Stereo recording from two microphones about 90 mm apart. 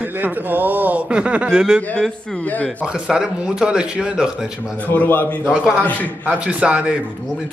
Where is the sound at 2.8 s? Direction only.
10° right (ahead or behind).